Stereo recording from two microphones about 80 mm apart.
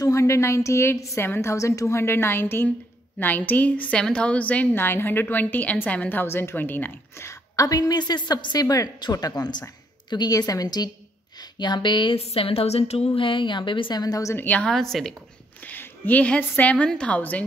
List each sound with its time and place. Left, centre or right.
0.0 s a woman's voice: left
7.2 s a woman's voice: left
11.5 s speech: left
13.2 s a woman's voice: left
14.0 s a woman's voice: left
14.3 s a woman's voice: left
14.7 s a woman's voice: centre
15.6 s a woman's voice: left